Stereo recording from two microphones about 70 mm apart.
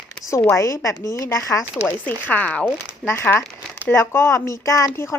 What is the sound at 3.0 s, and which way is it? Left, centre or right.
Speech, centre.